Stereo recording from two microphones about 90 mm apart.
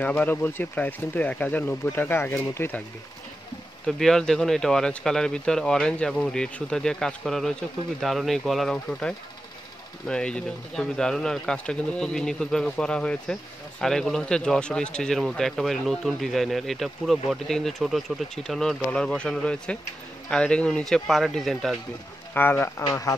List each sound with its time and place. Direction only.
0.0 s speech: 15° left (ahead or behind)
3.8 s speech: 5° left (ahead or behind)
22.3 s speech: 20° left (ahead or behind)